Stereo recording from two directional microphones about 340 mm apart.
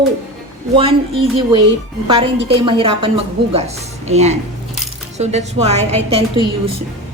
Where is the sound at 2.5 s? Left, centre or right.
Centre.